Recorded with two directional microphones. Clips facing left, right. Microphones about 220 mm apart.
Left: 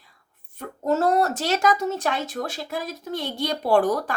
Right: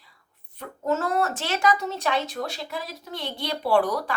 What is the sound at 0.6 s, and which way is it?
Speech, 35° left (ahead or behind).